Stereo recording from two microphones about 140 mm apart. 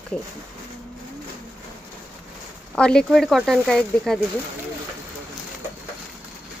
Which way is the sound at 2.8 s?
5° left (ahead or behind).